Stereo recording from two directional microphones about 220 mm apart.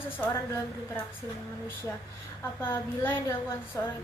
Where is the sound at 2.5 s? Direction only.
10° left (ahead or behind).